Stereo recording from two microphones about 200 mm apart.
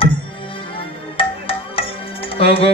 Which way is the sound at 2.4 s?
30° left (ahead or behind).